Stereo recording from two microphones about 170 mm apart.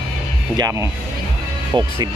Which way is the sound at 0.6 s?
20° right (ahead or behind).